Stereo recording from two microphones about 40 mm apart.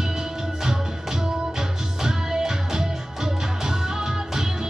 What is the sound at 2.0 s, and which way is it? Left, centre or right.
Music, centre.